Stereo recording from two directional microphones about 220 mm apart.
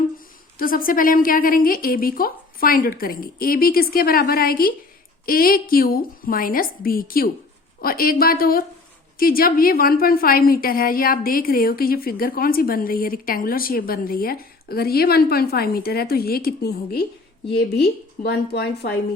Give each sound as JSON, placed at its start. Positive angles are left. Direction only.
{"t": 0.6, "sound": "a woman's voice", "side_deg": 40}